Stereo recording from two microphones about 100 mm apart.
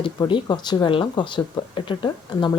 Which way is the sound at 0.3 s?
50° left (ahead or behind).